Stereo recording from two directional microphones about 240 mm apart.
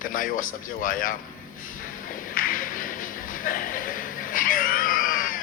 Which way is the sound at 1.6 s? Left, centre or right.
Left.